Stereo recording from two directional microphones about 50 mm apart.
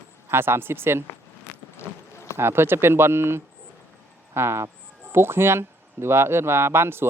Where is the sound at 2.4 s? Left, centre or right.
Right.